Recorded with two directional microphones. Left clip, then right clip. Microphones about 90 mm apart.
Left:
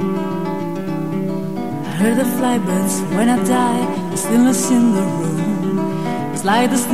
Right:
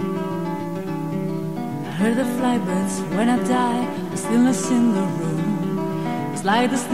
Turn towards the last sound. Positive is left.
turn(degrees=-30)  # may be behind; listen again after turning